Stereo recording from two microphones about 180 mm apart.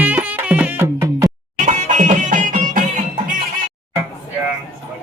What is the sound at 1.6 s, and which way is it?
Music, 45° right (ahead or behind).